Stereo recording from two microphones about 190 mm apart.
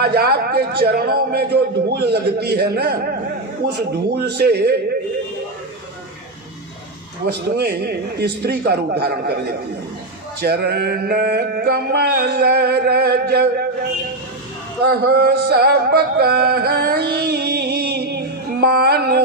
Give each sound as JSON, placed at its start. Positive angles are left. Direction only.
{"t": 0.0, "sound": "mantra", "side_deg": -55}
{"t": 7.3, "sound": "mantra", "side_deg": -60}
{"t": 14.8, "sound": "a sound", "side_deg": -55}